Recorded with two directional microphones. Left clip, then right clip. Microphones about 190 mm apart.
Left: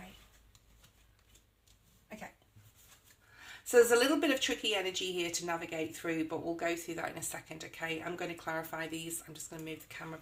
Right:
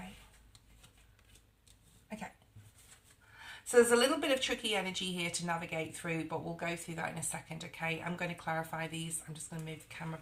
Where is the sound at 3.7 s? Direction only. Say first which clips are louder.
Left 1 dB; 40° left (ahead or behind).